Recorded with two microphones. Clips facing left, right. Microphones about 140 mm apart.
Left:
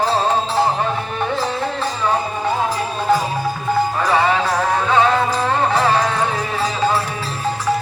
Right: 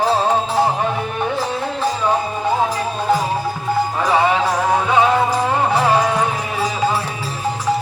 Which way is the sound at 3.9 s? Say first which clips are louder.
Right 1 dB; 15° right (ahead or behind).